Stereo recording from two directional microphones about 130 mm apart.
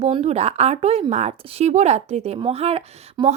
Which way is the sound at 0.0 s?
55° right (ahead or behind).